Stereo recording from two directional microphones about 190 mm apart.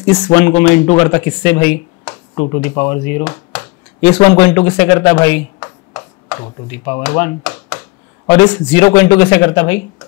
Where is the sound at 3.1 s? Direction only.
15° left (ahead or behind).